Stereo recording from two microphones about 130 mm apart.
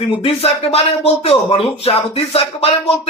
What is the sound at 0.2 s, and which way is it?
A man's voice, 50° left (ahead or behind).